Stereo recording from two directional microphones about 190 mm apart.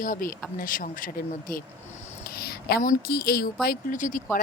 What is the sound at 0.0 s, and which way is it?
A woman's voice, 45° left (ahead or behind).